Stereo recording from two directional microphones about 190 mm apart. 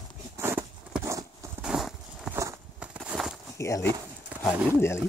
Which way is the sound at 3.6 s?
15° left (ahead or behind).